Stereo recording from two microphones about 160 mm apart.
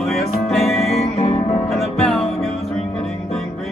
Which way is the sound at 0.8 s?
40° left (ahead or behind).